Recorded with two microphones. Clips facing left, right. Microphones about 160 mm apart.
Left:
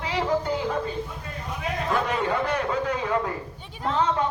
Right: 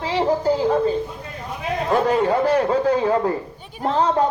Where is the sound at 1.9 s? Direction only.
35° right (ahead or behind).